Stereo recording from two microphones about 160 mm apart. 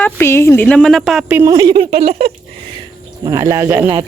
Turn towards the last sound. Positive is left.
turn(degrees=-15)  # may be behind; listen again after turning